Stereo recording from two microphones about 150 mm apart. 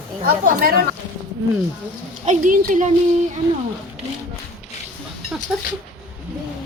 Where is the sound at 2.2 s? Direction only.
55° right (ahead or behind).